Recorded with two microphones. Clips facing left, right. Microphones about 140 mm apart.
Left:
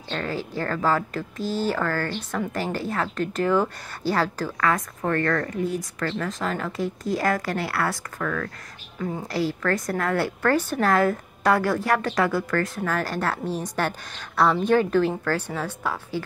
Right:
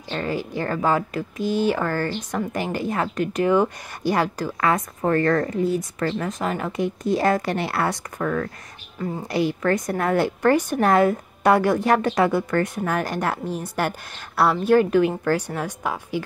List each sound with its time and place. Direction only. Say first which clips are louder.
0.1 s speech: right 3 dB; 10° right (ahead or behind)
1.4 s speech: right 4 dB; 60° right (ahead or behind)
1.7 s a woman's voice: right 3 dB; 15° right (ahead or behind)
8.9 s a woman's voice: right 1 dB; 5° right (ahead or behind)
9.3 s a woman's voice: right 4 dB; 20° right (ahead or behind)